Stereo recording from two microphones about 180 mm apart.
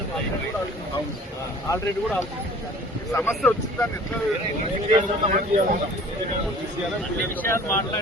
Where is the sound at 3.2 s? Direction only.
10° left (ahead or behind).